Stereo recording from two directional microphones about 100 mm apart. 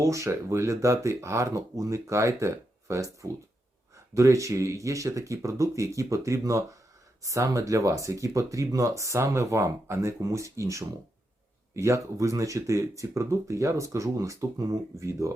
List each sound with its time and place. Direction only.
0.0 s speech: 30° right (ahead or behind)